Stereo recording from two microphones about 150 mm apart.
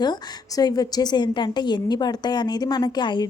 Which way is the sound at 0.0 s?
25° left (ahead or behind).